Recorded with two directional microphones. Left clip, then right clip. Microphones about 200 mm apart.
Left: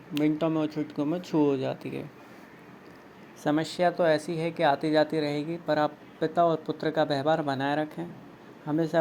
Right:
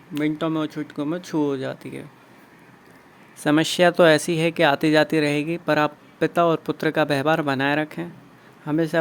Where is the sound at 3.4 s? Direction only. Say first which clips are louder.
Right 7 dB; 35° right (ahead or behind).